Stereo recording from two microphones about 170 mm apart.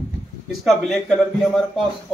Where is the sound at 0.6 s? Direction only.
Centre (ahead or behind).